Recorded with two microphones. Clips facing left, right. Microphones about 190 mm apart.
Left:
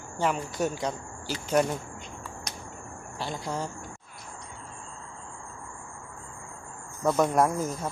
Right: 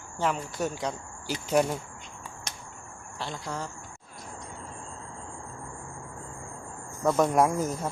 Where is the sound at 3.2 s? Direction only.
10° left (ahead or behind).